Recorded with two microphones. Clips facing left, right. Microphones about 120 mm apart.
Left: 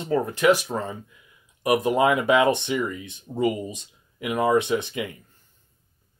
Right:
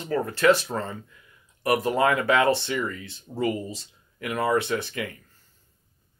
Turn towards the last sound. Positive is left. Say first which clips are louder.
# left 3 dB
turn(degrees=20)  # may be behind; listen again after turning